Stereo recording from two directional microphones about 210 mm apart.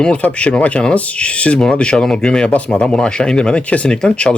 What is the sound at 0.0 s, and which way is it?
Speech, 5° left (ahead or behind).